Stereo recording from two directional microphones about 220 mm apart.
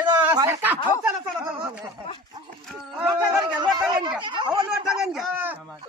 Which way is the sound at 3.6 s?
20° right (ahead or behind).